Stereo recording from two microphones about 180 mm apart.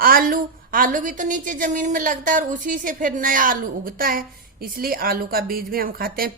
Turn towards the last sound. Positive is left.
turn(degrees=-55)  # may be behind; listen again after turning